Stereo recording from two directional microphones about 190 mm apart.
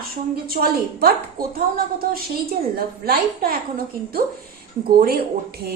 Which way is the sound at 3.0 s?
55° right (ahead or behind).